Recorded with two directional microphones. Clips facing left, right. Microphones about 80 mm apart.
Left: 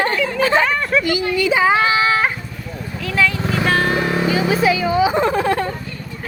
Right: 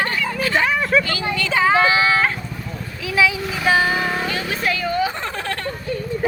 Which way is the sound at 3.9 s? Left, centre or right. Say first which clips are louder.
Left 4 dB; centre.